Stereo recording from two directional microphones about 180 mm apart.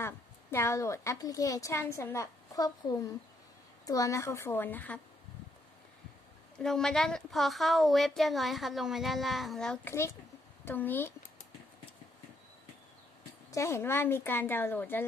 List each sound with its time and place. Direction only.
0.0 s a woman's voice: 15° left (ahead or behind)
6.6 s a woman's voice: 5° left (ahead or behind)
13.5 s a woman's voice: 15° left (ahead or behind)